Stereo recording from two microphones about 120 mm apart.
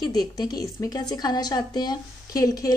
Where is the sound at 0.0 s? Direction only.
35° left (ahead or behind).